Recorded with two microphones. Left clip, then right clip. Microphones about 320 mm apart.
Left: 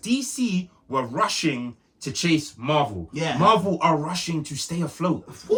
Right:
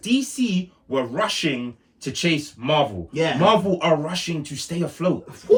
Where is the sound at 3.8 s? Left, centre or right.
Centre.